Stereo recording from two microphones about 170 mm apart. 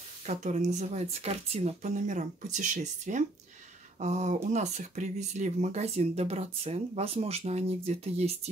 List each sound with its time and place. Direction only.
0.3 s speech: 45° right (ahead or behind)